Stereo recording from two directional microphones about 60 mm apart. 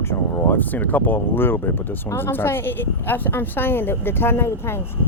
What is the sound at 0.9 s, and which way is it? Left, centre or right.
Speech, left.